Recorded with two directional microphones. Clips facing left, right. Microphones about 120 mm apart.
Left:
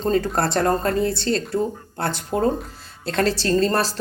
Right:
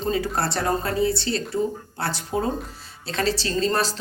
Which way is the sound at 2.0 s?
50° left (ahead or behind).